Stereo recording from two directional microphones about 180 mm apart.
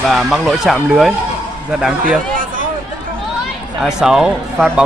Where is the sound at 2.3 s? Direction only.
50° right (ahead or behind).